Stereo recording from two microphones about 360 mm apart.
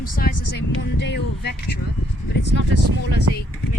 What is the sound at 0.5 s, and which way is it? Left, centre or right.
Speech, left.